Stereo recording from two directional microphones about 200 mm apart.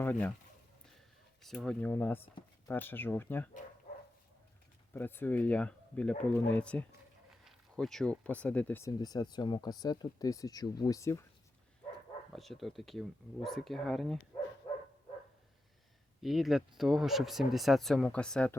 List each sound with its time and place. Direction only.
0.0 s speech: 10° left (ahead or behind)
1.4 s speech: centre (ahead or behind)
4.9 s speech: 10° left (ahead or behind)
7.3 s a sound: centre (ahead or behind)
8.2 s speech: 5° left (ahead or behind)
12.3 s speech: centre (ahead or behind)
16.2 s speech: centre (ahead or behind)